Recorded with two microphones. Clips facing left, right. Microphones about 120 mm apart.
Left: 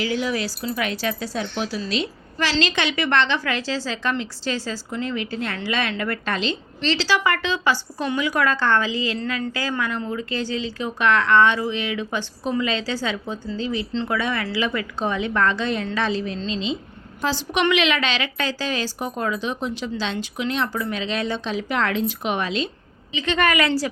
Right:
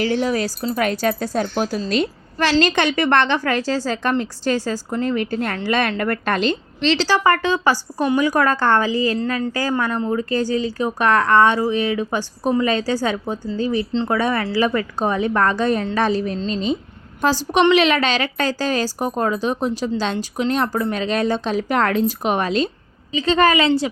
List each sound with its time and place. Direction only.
0.0 s a woman's voice: 40° right (ahead or behind)
13.7 s a woman's voice: 35° right (ahead or behind)